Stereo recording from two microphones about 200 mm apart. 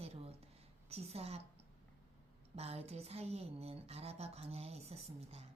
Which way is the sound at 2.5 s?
30° right (ahead or behind).